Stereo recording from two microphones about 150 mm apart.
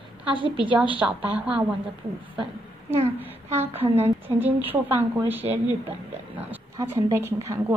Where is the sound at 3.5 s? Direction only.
15° right (ahead or behind).